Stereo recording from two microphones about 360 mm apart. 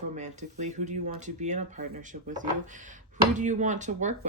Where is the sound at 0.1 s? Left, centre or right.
Centre.